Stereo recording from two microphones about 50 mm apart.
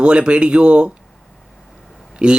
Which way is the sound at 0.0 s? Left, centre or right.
Right.